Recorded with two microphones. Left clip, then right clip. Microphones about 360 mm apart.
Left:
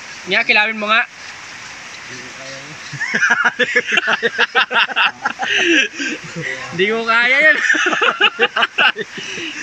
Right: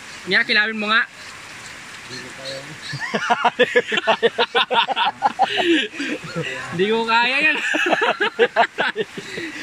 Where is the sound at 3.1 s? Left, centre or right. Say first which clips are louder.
Left 4 dB; centre.